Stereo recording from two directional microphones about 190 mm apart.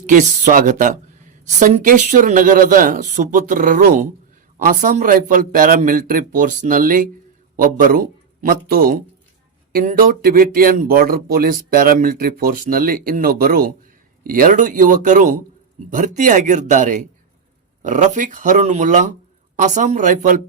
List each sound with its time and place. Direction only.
0.0 s a man's voice: 40° right (ahead or behind)